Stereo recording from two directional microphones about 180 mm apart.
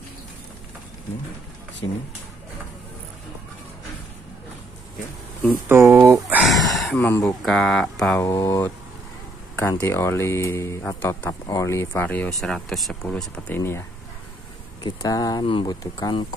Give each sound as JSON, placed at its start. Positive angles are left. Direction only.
{"t": 5.7, "sound": "speech", "side_deg": -10}
{"t": 6.4, "sound": "a sound", "side_deg": 0}
{"t": 7.1, "sound": "speech", "side_deg": 15}
{"t": 7.4, "sound": "speech", "side_deg": 0}
{"t": 8.2, "sound": "speech", "side_deg": 15}